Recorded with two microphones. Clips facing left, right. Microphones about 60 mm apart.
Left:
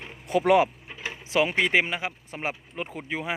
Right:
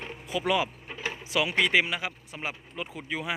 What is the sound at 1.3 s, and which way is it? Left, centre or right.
Speech, left.